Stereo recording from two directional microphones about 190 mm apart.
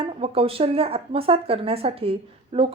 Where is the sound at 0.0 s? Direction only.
30° right (ahead or behind).